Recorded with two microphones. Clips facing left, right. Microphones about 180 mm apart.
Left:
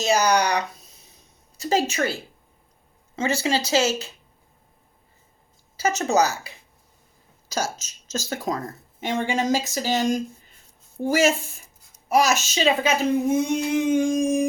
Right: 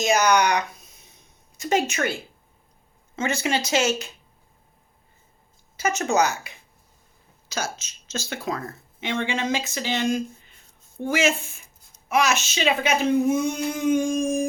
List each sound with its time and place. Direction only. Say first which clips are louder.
0.0 s speech: even; 35° left (ahead or behind)
3.2 s speech: left 2 dB; 30° left (ahead or behind)
5.7 s speech: left 1 dB; 35° left (ahead or behind)